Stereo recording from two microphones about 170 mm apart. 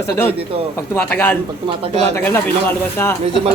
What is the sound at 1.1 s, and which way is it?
Speech, 10° left (ahead or behind).